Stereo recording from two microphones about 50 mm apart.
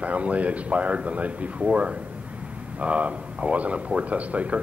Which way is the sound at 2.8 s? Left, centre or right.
Right.